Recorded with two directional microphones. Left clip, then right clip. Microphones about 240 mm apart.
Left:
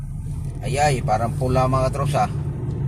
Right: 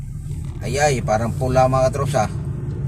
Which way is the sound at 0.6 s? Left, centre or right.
Right.